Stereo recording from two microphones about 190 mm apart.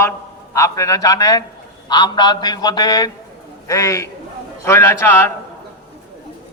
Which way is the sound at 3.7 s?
15° left (ahead or behind).